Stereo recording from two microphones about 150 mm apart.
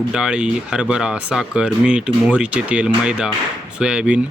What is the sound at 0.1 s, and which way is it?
Speech, 5° right (ahead or behind).